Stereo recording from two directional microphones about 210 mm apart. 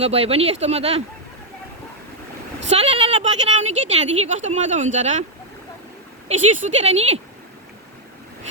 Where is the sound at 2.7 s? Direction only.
30° right (ahead or behind).